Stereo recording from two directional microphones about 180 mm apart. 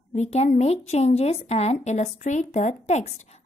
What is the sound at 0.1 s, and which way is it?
A woman's voice, 35° left (ahead or behind).